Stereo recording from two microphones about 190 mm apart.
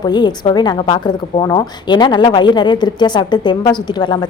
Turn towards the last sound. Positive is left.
turn(degrees=25)  # may be behind; listen again after turning